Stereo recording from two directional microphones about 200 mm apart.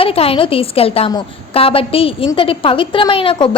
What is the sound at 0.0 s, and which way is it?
A woman's voice, 30° left (ahead or behind).